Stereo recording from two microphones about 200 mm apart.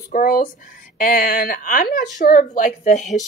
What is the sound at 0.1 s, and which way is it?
Speech, 45° left (ahead or behind).